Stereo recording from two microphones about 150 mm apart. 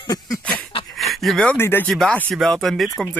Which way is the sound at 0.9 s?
Centre (ahead or behind).